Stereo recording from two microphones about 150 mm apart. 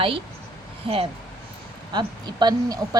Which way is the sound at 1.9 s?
30° right (ahead or behind).